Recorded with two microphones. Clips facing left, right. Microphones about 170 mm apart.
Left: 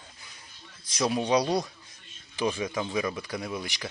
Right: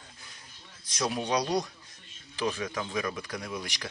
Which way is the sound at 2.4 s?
20° left (ahead or behind).